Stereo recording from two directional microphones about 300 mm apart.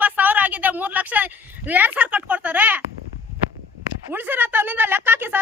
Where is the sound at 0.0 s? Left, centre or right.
Centre.